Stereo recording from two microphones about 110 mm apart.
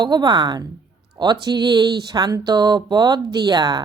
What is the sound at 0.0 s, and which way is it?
Speech, 40° right (ahead or behind).